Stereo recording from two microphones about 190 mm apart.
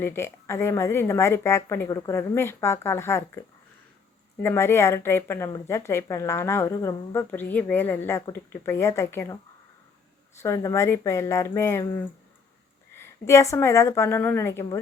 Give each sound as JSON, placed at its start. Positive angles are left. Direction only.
{"t": 0.0, "sound": "speech", "side_deg": 10}
{"t": 4.4, "sound": "speech", "side_deg": 15}
{"t": 10.4, "sound": "speech", "side_deg": 15}
{"t": 13.0, "sound": "speech", "side_deg": 15}